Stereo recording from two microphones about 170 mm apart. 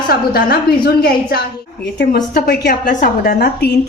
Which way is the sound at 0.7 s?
65° left (ahead or behind).